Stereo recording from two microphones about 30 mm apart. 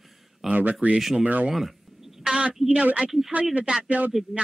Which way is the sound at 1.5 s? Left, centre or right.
Centre.